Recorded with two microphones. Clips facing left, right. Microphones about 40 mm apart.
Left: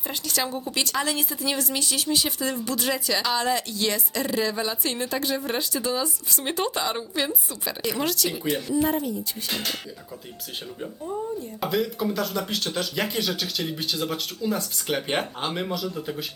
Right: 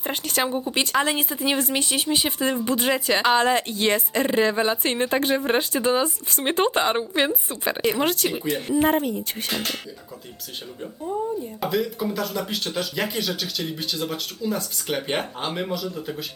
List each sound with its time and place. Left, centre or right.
0.1 s speech: right
0.4 s speech: right
11.6 s speech: centre